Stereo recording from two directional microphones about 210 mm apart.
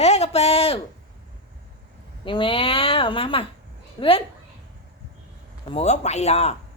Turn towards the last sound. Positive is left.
turn(degrees=30)  # may be behind; listen again after turning